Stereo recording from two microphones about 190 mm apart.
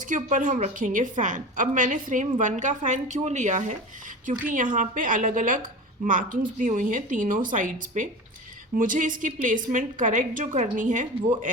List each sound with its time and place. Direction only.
0.0 s a woman's voice: 40° right (ahead or behind)